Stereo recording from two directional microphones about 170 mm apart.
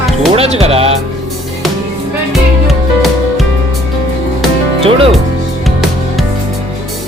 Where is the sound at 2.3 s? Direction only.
Centre (ahead or behind).